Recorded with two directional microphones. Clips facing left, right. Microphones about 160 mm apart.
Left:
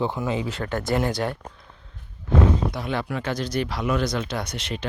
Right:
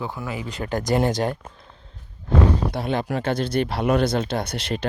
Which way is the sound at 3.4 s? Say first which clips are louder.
Right 4 dB; 55° right (ahead or behind).